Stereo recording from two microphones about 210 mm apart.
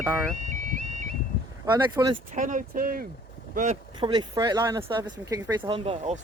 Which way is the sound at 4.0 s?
20° right (ahead or behind).